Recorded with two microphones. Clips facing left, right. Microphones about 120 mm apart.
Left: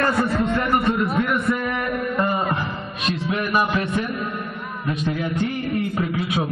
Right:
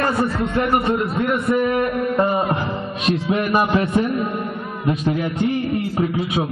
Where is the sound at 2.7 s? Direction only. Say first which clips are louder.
Right 5 dB; 25° right (ahead or behind).